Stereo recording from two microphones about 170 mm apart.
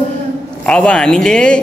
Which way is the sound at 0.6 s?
5° left (ahead or behind).